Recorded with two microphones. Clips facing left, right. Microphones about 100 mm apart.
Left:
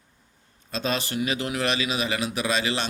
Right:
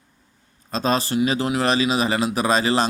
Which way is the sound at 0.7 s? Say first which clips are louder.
Right 6 dB; 35° right (ahead or behind).